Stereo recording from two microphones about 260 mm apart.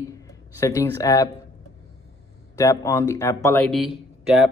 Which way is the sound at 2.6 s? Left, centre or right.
Centre.